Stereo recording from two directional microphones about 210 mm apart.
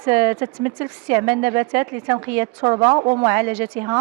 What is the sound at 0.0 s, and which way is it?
A woman's voice, 10° right (ahead or behind).